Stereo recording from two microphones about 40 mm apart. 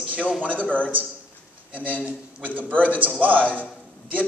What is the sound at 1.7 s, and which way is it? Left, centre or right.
Speech, right.